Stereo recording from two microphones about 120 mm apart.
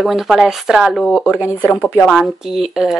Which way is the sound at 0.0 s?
5° right (ahead or behind).